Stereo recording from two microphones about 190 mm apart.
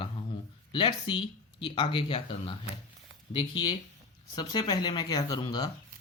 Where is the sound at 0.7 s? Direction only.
25° left (ahead or behind).